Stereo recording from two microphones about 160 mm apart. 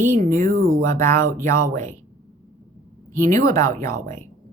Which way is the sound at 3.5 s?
20° left (ahead or behind).